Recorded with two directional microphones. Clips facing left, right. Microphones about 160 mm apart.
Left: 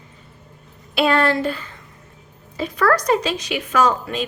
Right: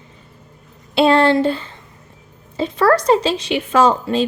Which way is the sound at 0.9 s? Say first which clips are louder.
Right 5 dB; 25° right (ahead or behind).